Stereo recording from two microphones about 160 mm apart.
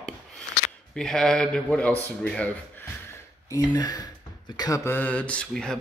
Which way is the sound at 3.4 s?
20° left (ahead or behind).